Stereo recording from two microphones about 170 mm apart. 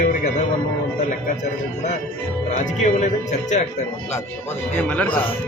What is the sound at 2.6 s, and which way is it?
Speech, 45° left (ahead or behind).